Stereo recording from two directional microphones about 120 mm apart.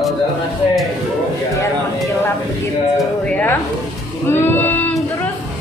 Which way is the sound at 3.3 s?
10° left (ahead or behind).